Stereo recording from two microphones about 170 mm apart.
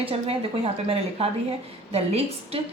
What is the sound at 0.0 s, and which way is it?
A woman's voice, 35° right (ahead or behind).